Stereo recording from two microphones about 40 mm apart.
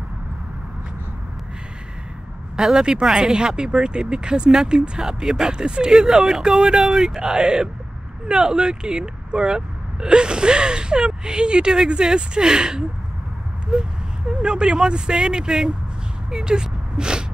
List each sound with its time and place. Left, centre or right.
2.5 s speech: centre
5.0 s speech: centre
5.5 s speech: right
7.2 s speech: right